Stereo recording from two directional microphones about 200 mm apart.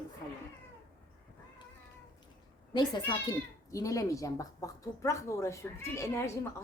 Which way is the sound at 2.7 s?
20° left (ahead or behind).